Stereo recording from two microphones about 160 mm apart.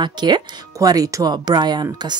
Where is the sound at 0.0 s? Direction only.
25° right (ahead or behind).